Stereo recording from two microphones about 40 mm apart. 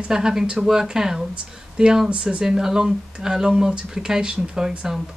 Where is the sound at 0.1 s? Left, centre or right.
Centre.